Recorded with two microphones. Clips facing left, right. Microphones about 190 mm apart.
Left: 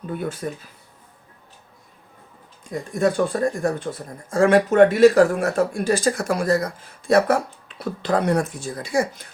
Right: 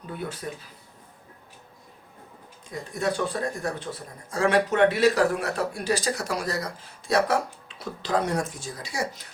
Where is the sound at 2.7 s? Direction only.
50° left (ahead or behind).